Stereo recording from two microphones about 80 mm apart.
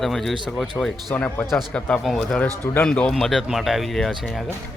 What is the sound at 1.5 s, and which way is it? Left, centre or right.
A man's voice, centre.